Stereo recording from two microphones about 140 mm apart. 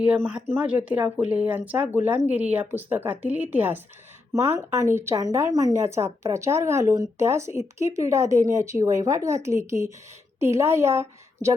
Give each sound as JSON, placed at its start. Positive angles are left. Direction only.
{"t": 0.0, "sound": "a woman's voice", "side_deg": -10}